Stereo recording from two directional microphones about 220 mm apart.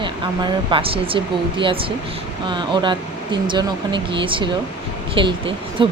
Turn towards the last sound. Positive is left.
turn(degrees=-25)  # may be behind; listen again after turning